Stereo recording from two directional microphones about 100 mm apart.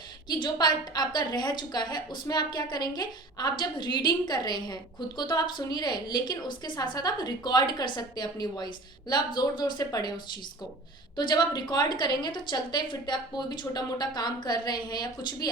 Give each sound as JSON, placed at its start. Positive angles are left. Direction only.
{"t": 0.3, "sound": "a woman's voice", "side_deg": 45}
{"t": 11.2, "sound": "a woman's voice", "side_deg": 50}